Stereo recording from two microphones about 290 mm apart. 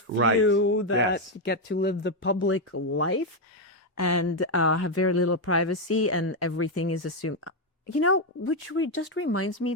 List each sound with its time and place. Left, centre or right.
0.4 s speech: left
3.9 s speech: left